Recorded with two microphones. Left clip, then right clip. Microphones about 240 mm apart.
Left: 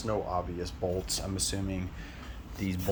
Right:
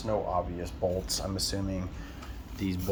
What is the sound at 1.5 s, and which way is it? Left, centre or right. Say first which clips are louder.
Speech: right 1 dB; left.